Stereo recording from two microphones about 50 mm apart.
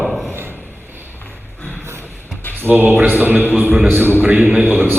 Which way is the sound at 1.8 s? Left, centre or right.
Right.